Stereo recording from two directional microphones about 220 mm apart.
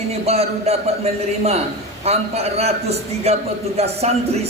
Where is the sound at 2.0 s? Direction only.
30° right (ahead or behind).